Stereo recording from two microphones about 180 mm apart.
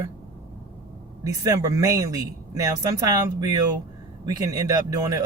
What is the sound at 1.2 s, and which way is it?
Speech, 20° right (ahead or behind).